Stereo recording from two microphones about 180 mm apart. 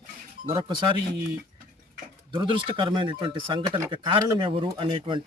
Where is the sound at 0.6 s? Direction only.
25° right (ahead or behind).